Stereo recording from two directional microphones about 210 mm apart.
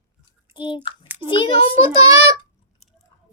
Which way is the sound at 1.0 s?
10° right (ahead or behind).